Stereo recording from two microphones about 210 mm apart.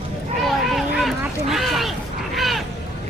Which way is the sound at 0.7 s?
Centre (ahead or behind).